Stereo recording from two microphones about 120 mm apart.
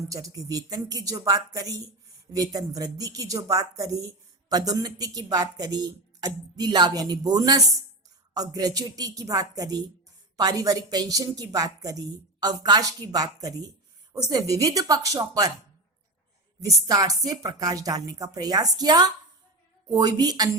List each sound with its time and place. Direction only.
0.1 s a woman's voice: 30° right (ahead or behind)
16.6 s a woman's voice: 30° right (ahead or behind)